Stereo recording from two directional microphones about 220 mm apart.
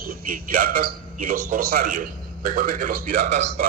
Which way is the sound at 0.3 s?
40° right (ahead or behind).